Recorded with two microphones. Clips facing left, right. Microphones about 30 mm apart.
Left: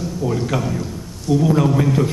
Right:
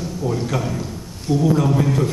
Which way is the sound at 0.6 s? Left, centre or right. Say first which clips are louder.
Left 2 dB; centre.